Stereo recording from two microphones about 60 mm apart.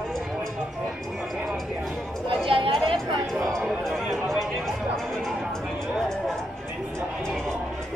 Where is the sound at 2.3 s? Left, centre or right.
Centre.